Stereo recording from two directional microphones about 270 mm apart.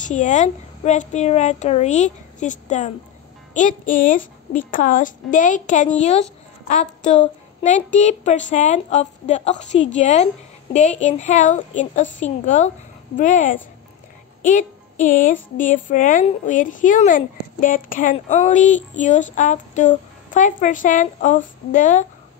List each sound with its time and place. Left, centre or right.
0.0 s a woman's voice: left
14.4 s music: left
15.5 s a woman's voice: left